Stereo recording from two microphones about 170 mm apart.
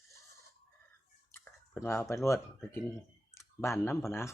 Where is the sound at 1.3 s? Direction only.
15° left (ahead or behind).